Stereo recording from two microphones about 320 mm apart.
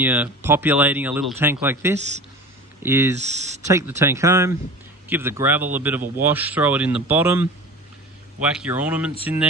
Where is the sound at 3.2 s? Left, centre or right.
Right.